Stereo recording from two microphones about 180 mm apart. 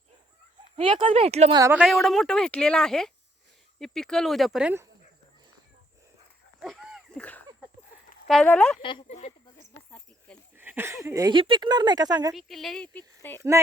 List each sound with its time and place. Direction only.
0.8 s speech: 30° right (ahead or behind)
1.7 s speech: centre (ahead or behind)
6.7 s a sound: centre (ahead or behind)
8.3 s speech: 5° left (ahead or behind)
8.8 s speech: 25° left (ahead or behind)
9.0 s speech: 40° left (ahead or behind)
10.6 s speech: 10° right (ahead or behind)
12.3 s speech: centre (ahead or behind)